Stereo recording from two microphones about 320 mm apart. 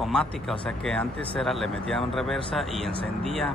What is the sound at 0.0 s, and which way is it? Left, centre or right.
Speech, centre.